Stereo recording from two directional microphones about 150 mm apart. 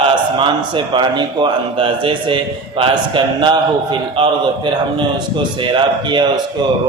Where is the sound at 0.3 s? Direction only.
30° right (ahead or behind).